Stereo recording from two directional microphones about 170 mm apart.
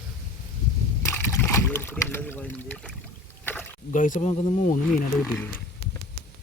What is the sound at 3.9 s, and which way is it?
Speech, 50° left (ahead or behind).